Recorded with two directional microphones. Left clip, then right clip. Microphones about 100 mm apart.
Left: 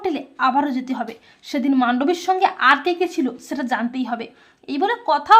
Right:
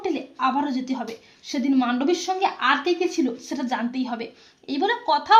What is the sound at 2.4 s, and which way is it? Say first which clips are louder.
A woman's voice: left 7 dB; 30° left (ahead or behind).